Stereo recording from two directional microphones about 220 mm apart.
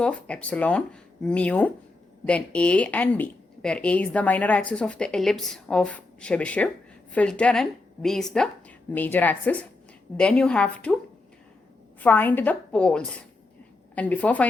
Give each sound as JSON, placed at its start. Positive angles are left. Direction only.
{"t": 0.0, "sound": "a woman's voice", "side_deg": 5}
{"t": 11.9, "sound": "a woman's voice", "side_deg": 10}